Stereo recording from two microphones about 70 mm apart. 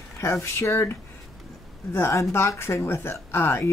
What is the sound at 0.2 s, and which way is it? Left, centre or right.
A woman's voice, left.